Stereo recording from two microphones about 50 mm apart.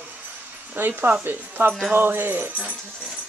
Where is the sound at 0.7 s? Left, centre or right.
Right.